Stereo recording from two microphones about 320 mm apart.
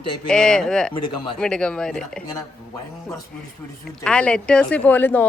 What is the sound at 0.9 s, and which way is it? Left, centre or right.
Speech, centre.